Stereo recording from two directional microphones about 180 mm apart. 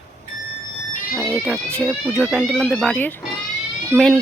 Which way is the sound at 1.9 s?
5° right (ahead or behind).